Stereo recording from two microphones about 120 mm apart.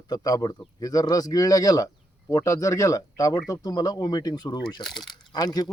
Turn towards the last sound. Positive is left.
turn(degrees=35)  # may be behind; listen again after turning